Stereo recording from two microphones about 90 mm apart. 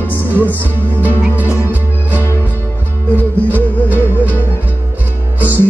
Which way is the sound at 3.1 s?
20° left (ahead or behind).